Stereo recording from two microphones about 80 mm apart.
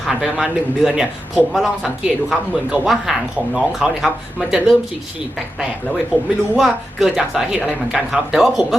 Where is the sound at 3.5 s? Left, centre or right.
Centre.